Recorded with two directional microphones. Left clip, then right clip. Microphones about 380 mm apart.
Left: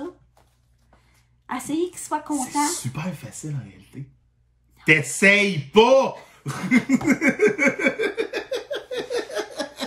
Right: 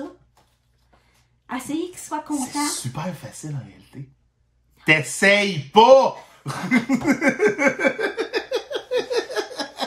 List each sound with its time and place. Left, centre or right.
1.5 s speech: centre
4.7 s speech: centre
6.7 s a sound: centre